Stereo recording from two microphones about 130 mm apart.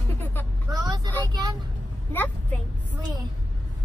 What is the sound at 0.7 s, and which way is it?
Speech, 30° right (ahead or behind).